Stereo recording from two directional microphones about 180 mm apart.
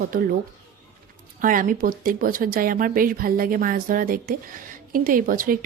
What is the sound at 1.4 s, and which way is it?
Speech, 50° right (ahead or behind).